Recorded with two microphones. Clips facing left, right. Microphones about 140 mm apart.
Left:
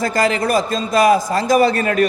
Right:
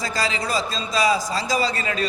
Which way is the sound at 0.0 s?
55° left (ahead or behind).